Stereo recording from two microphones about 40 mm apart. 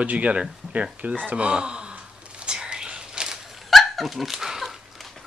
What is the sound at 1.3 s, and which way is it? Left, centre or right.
Speech, right.